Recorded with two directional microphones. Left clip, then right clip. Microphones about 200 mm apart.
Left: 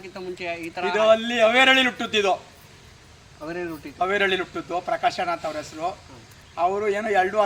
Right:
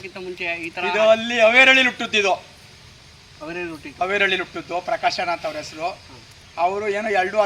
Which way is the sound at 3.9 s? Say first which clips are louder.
Right 2 dB; 5° right (ahead or behind).